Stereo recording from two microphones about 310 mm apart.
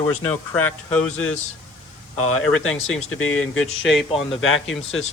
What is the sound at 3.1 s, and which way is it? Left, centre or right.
Speech, left.